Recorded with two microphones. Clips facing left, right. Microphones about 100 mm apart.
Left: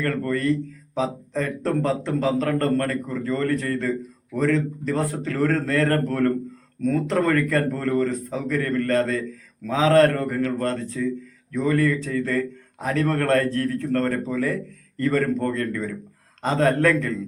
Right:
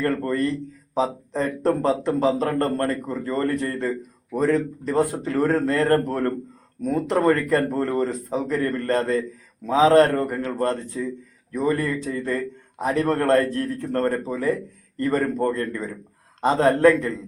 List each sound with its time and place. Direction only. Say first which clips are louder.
0.0 s speech: right 1 dB; 25° right (ahead or behind)